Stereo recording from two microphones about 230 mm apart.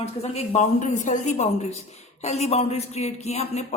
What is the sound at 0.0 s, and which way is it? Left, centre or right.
A woman's voice, left.